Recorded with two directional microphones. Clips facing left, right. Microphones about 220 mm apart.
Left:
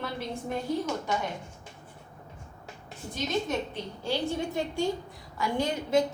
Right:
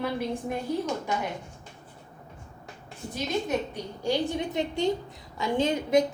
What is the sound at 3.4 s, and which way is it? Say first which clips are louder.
A woman's voice: right 2 dB; 15° right (ahead or behind).